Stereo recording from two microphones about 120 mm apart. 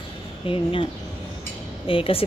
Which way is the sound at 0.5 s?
50° left (ahead or behind).